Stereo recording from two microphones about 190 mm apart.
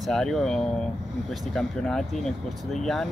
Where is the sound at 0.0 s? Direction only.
Centre (ahead or behind).